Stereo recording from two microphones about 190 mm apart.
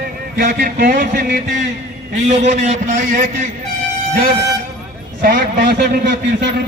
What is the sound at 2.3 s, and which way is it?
Speech, 35° right (ahead or behind).